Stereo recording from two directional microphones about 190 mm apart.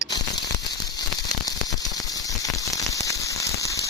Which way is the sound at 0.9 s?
20° left (ahead or behind).